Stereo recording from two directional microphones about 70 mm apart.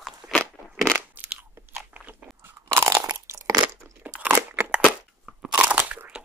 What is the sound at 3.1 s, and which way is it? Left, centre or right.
Crunch, right.